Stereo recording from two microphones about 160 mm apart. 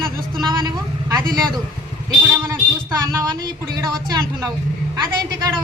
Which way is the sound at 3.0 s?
25° right (ahead or behind).